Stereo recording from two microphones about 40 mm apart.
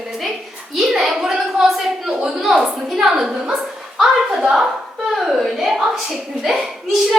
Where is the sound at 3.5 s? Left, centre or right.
Centre.